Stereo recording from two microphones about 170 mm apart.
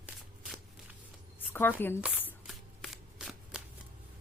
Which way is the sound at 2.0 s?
10° right (ahead or behind).